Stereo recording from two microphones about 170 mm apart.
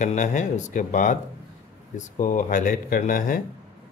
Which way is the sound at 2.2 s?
50° left (ahead or behind).